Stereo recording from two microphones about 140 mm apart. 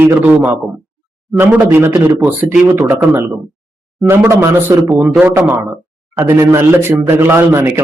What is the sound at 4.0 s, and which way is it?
Speech, 20° right (ahead or behind).